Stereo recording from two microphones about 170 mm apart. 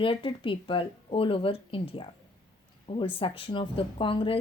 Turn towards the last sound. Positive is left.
turn(degrees=30)  # may be behind; listen again after turning